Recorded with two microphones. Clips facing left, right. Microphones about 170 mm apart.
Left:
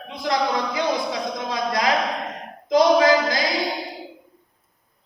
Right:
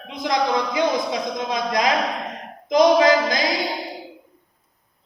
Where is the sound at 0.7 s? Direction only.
20° right (ahead or behind).